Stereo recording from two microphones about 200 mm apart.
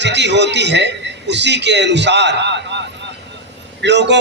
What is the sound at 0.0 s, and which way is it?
A man's voice, 60° right (ahead or behind).